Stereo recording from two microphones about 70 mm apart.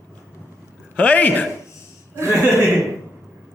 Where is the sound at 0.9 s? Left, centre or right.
Centre.